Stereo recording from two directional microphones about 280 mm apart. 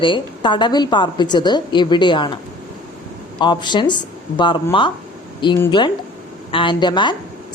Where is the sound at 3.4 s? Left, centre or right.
Centre.